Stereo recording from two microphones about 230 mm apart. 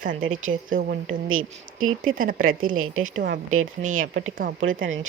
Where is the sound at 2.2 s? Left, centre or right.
Right.